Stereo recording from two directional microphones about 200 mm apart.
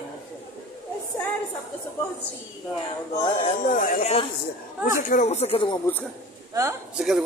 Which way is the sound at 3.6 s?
40° left (ahead or behind).